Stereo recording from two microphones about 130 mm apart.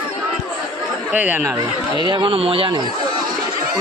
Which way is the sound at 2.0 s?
40° right (ahead or behind).